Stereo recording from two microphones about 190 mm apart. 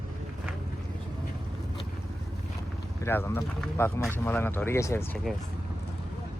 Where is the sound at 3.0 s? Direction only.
15° left (ahead or behind).